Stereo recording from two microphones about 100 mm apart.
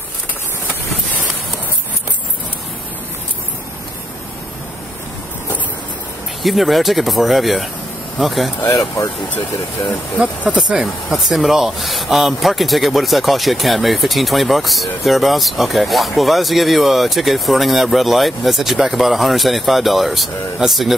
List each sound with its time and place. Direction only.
6.4 s speech: centre (ahead or behind)
8.6 s speech: 35° left (ahead or behind)
10.2 s speech: 10° right (ahead or behind)